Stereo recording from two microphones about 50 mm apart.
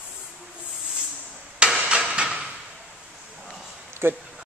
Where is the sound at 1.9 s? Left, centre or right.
Centre.